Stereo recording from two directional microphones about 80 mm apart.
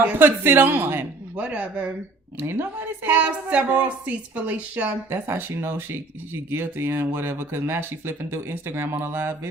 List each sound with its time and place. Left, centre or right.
0.2 s speech: right
2.4 s speech: right
5.0 s speech: right